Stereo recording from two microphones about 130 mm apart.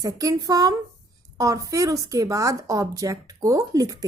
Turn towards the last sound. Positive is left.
turn(degrees=-25)  # may be behind; listen again after turning